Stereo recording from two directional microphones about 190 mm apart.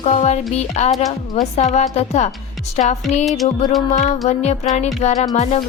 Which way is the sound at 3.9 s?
35° left (ahead or behind).